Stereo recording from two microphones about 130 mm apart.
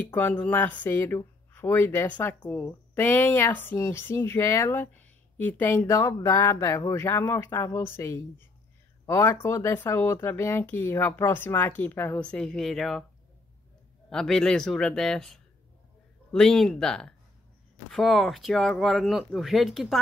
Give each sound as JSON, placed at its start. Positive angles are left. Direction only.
{"t": 0.0, "sound": "speech", "side_deg": 15}
{"t": 14.1, "sound": "speech", "side_deg": 5}